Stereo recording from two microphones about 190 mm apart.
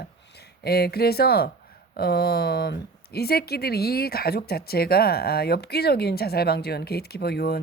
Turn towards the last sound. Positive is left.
turn(degrees=55)  # may be behind; listen again after turning